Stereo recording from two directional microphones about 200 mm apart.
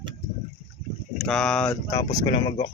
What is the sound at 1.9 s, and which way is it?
Speech, 20° left (ahead or behind).